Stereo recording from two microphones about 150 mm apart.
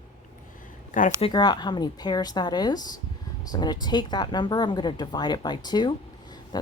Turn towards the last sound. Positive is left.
turn(degrees=30)  # may be behind; listen again after turning